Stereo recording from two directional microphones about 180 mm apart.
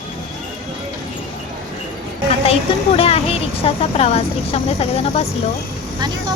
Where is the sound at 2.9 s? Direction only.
35° left (ahead or behind).